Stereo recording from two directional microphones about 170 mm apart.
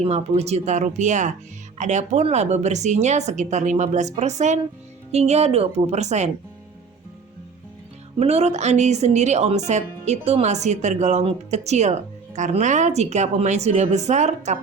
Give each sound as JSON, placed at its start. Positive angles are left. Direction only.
{"t": 0.0, "sound": "speech", "side_deg": -40}
{"t": 8.2, "sound": "speech", "side_deg": -40}